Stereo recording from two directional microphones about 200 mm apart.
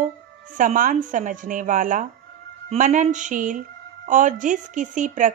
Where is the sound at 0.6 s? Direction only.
40° right (ahead or behind).